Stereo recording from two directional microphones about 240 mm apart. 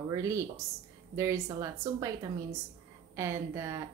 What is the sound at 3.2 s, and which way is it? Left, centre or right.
Speech, centre.